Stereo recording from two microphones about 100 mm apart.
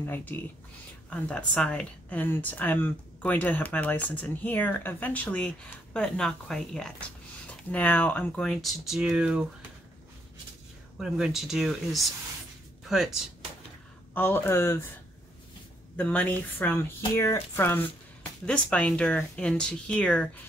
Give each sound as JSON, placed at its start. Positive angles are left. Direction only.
{"t": 0.0, "sound": "speech", "side_deg": 20}
{"t": 8.3, "sound": "speech", "side_deg": 5}
{"t": 11.0, "sound": "speech", "side_deg": -5}
{"t": 14.1, "sound": "speech", "side_deg": 20}
{"t": 16.0, "sound": "speech", "side_deg": 15}
{"t": 18.4, "sound": "speech", "side_deg": 10}